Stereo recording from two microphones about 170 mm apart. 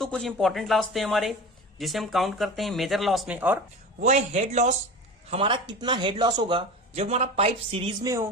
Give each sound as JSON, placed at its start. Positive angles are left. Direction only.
{"t": 0.0, "sound": "speech", "side_deg": 5}
{"t": 4.0, "sound": "a man's voice", "side_deg": -45}
{"t": 5.3, "sound": "a man's voice", "side_deg": -30}
{"t": 8.0, "sound": "a sound", "side_deg": -20}